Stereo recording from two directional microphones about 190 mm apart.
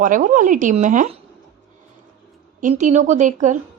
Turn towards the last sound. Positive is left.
turn(degrees=-40)  # may be behind; listen again after turning